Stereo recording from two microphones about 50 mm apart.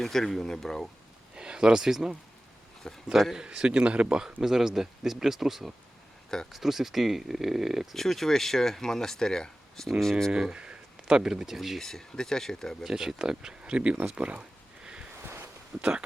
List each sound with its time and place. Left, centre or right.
0.0 s speech: centre
1.4 s speech: centre
2.8 s speech: centre
3.3 s speech: centre
4.4 s speech: centre
7.9 s speech: centre
10.3 s speech: centre
11.8 s speech: centre
12.8 s speech: centre
15.7 s speech: centre